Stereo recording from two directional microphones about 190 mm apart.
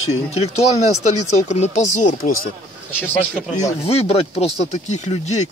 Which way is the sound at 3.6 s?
35° left (ahead or behind).